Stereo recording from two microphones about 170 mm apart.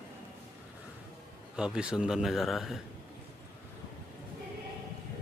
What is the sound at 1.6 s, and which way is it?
Speech, 5° right (ahead or behind).